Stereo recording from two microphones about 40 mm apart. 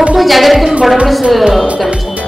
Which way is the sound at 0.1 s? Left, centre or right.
Centre.